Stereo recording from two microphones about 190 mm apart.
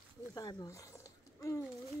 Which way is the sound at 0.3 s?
20° left (ahead or behind).